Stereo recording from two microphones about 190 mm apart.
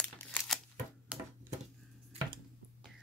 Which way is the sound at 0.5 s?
Centre (ahead or behind).